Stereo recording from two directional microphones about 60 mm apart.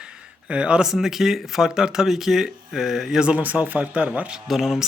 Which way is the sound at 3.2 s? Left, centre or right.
Right.